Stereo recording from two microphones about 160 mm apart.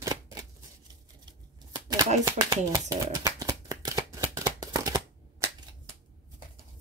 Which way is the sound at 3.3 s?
20° right (ahead or behind).